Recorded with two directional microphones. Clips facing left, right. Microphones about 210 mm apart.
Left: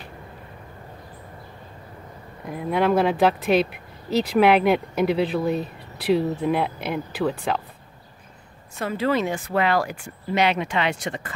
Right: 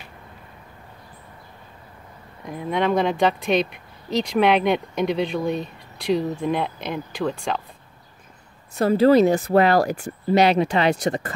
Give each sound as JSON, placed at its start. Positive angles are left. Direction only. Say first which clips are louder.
{"t": 2.4, "sound": "speech", "louder": "left 1 dB", "side_deg": 5}
{"t": 8.7, "sound": "speech", "louder": "right 8 dB", "side_deg": -35}